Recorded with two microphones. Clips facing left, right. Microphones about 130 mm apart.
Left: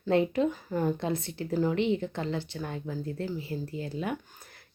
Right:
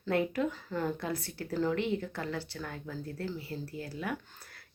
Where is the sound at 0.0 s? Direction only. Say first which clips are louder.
Left 5 dB; 25° left (ahead or behind).